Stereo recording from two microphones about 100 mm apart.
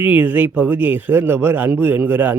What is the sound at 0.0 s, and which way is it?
Speech, 15° right (ahead or behind).